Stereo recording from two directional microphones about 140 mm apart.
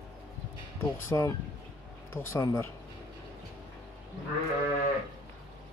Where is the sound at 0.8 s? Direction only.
20° left (ahead or behind).